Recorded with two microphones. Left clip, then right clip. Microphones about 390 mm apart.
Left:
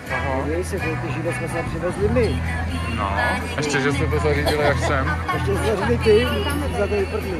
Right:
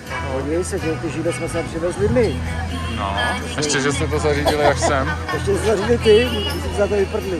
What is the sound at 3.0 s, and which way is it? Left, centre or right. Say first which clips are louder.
Speech: even; centre.